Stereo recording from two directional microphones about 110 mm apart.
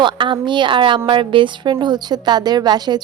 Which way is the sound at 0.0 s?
45° right (ahead or behind).